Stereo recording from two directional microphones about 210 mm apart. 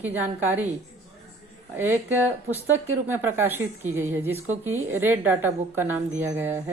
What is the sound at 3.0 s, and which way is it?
A woman's voice, 10° right (ahead or behind).